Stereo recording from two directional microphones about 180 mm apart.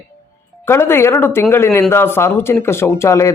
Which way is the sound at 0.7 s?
15° left (ahead or behind).